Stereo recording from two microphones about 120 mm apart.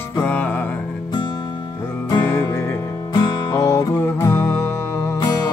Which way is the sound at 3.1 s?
40° left (ahead or behind).